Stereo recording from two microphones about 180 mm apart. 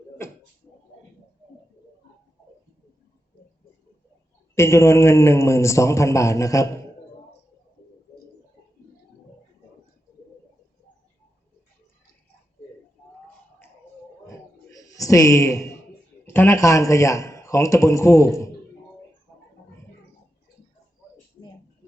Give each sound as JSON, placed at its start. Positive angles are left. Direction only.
{"t": 4.5, "sound": "a man's voice", "side_deg": 15}
{"t": 14.3, "sound": "a sound", "side_deg": 20}
{"t": 16.3, "sound": "a man's voice", "side_deg": 15}